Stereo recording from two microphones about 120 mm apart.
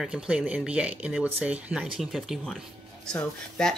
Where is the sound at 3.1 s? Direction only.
10° left (ahead or behind).